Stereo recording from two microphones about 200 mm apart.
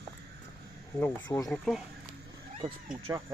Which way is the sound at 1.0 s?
15° left (ahead or behind).